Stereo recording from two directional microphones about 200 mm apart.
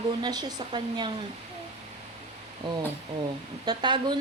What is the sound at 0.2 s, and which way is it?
Speech, 20° right (ahead or behind).